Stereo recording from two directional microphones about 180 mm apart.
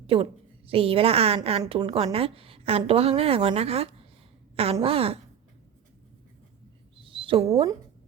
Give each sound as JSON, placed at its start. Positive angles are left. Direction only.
{"t": 0.1, "sound": "a woman's voice", "side_deg": -30}
{"t": 6.9, "sound": "a sound", "side_deg": -30}
{"t": 7.5, "sound": "speech", "side_deg": -25}